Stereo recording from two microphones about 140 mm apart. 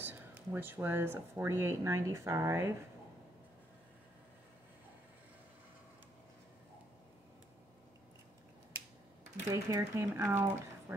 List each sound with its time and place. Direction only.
0.0 s speech: 15° right (ahead or behind)
9.5 s speech: 25° right (ahead or behind)